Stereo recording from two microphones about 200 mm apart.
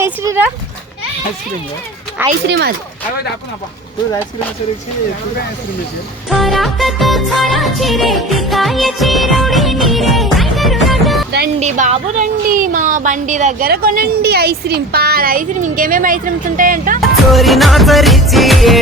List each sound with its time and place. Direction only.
0.0 s speech: 10° right (ahead or behind)
2.5 s speech: 55° right (ahead or behind)
6.2 s music: centre (ahead or behind)
11.6 s speech: 35° right (ahead or behind)
17.0 s music: centre (ahead or behind)